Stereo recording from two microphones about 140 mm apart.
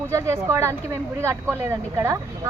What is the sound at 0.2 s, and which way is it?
Speech, 20° right (ahead or behind).